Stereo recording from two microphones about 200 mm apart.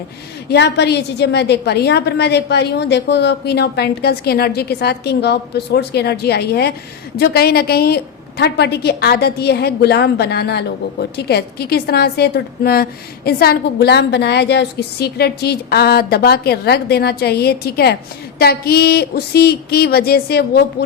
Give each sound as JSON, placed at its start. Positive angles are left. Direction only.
{"t": 0.5, "sound": "a woman's voice", "side_deg": 55}